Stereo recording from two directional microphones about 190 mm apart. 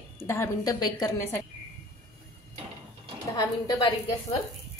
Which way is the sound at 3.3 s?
20° left (ahead or behind).